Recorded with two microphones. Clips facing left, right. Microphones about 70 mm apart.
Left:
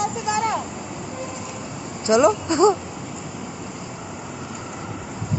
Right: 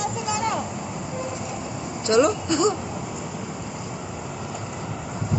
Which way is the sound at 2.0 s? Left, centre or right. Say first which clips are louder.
Left 2 dB; left.